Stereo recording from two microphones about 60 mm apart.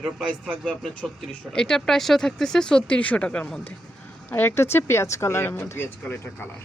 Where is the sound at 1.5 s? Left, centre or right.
Centre.